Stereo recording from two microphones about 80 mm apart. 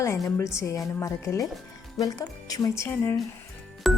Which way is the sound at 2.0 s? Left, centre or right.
Left.